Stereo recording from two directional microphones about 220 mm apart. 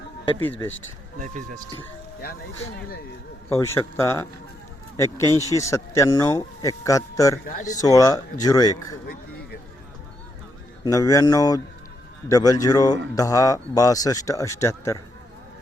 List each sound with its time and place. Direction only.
1.2 s speech: 40° right (ahead or behind)
3.5 s speech: 15° left (ahead or behind)
10.8 s speech: 15° left (ahead or behind)